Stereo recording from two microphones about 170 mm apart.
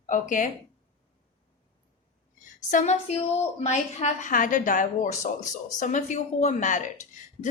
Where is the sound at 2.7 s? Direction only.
45° left (ahead or behind).